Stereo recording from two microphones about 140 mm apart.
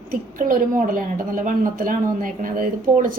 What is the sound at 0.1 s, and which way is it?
A woman's voice, 85° right.